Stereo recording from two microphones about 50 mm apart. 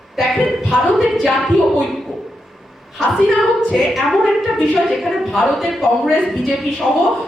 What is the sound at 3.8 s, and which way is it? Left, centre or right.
A woman's voice, centre.